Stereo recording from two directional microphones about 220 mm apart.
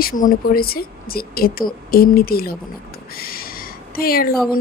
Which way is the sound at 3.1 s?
40° left (ahead or behind).